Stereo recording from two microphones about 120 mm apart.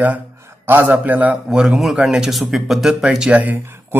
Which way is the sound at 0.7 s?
20° right (ahead or behind).